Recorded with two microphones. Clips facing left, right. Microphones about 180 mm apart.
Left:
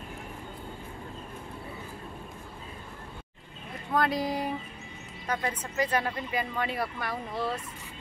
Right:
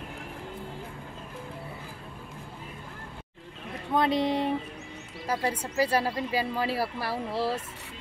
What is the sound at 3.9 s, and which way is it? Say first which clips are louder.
Speech: right 3 dB; 25° right (ahead or behind).